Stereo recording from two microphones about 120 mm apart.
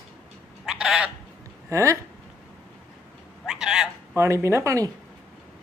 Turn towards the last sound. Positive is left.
turn(degrees=-25)  # may be behind; listen again after turning